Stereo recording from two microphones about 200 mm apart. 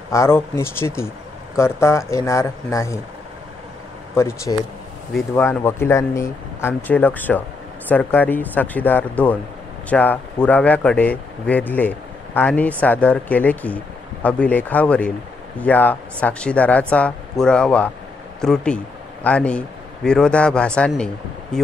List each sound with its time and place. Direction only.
0.1 s speech: 15° left (ahead or behind)
4.1 s a man's voice: 15° left (ahead or behind)